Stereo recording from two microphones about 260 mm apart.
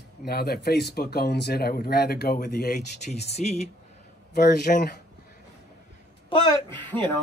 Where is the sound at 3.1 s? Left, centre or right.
Left.